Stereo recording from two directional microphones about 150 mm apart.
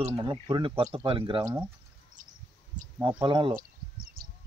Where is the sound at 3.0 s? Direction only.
30° right (ahead or behind).